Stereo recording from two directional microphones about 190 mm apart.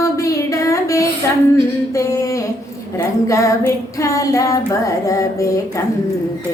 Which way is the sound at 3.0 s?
15° left (ahead or behind).